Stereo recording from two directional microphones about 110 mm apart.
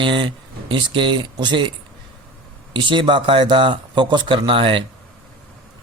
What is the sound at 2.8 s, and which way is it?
Speech, 50° right (ahead or behind).